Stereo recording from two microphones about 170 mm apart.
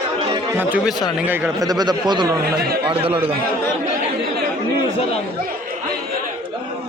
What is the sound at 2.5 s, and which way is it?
Speech, 65° right (ahead or behind).